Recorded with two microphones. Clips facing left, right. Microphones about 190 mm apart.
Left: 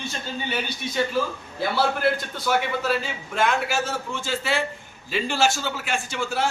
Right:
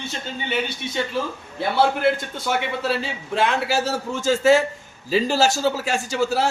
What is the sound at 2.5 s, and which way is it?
A man's voice, 30° right (ahead or behind).